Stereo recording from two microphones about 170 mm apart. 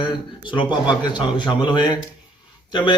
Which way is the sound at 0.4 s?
30° left (ahead or behind).